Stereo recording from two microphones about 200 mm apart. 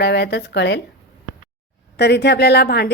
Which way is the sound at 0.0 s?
55° left (ahead or behind).